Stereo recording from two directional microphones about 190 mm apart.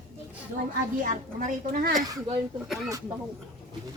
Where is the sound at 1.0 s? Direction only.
45° right (ahead or behind).